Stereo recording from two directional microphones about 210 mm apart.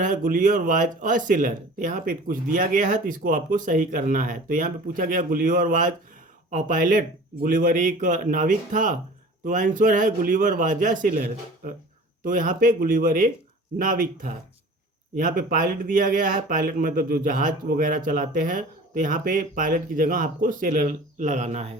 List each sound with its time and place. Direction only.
0.0 s speech: 40° right (ahead or behind)